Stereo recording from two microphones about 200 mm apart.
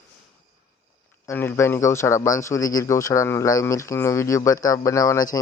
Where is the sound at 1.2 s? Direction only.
10° left (ahead or behind).